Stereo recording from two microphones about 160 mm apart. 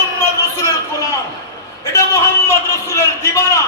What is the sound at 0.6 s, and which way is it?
A man's voice, 20° left (ahead or behind).